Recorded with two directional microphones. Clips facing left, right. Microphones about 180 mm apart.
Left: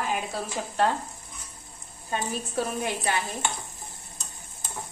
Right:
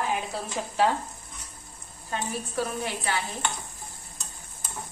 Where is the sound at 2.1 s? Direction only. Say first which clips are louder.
Left 1 dB; 15° left (ahead or behind).